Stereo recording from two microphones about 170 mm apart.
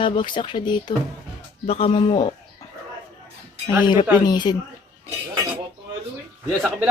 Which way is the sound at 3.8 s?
25° left (ahead or behind).